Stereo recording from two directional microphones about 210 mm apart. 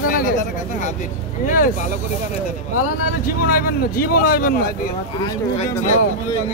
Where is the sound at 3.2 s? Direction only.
45° left (ahead or behind).